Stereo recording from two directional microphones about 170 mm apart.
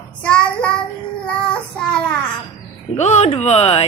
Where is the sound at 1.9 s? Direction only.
5° left (ahead or behind).